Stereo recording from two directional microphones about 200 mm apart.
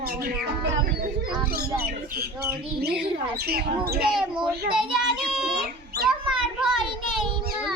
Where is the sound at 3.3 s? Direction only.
50° right (ahead or behind).